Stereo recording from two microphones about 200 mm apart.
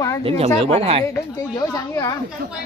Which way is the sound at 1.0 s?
20° left (ahead or behind).